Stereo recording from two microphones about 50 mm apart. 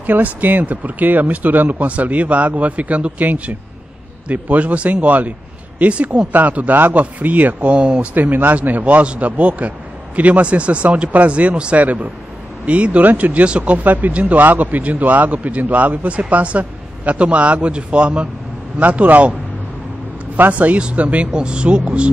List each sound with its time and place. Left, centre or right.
0.0 s a man's voice: right
7.7 s a man's voice: centre
20.5 s a man's voice: right